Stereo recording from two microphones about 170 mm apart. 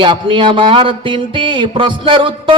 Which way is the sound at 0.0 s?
30° right (ahead or behind).